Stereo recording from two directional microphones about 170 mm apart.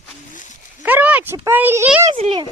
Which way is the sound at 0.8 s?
10° right (ahead or behind).